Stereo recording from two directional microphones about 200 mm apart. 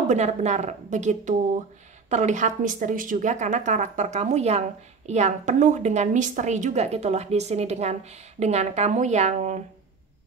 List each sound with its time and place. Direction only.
0.1 s speech: 35° right (ahead or behind)